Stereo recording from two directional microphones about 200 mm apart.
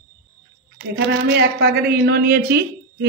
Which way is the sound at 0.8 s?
60° right (ahead or behind).